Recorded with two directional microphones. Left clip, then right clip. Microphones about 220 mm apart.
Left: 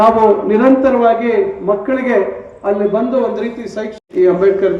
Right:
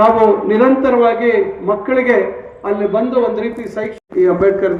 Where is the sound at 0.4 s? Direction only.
50° left (ahead or behind).